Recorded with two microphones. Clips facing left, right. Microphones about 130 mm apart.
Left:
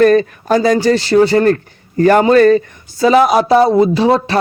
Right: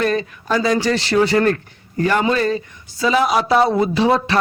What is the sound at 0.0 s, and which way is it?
Speech, 50° left (ahead or behind).